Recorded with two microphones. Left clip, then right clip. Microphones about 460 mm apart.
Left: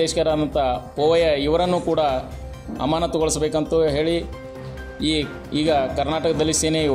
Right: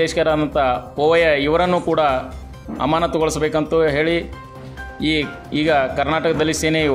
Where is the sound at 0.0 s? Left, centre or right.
Left.